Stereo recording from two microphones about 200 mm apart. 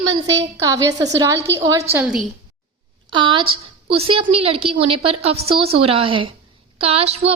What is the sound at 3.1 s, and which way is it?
A woman's voice, 25° right (ahead or behind).